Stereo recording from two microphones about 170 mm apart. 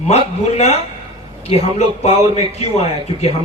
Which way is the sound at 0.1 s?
40° left (ahead or behind).